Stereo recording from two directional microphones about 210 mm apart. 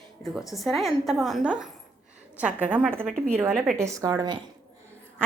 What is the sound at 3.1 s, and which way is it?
Speech, 5° left (ahead or behind).